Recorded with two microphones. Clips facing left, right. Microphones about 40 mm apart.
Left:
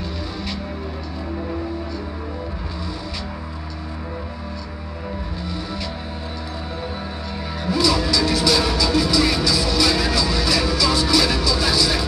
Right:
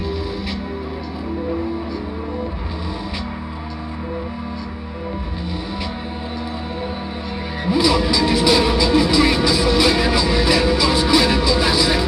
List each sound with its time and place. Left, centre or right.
7.6 s music: centre